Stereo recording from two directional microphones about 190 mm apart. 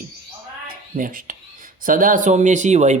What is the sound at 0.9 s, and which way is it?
Speech, 45° right (ahead or behind).